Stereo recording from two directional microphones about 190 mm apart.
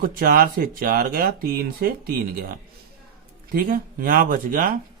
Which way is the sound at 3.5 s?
45° right (ahead or behind).